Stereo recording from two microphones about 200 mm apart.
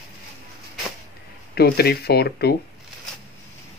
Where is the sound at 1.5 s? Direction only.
50° left (ahead or behind).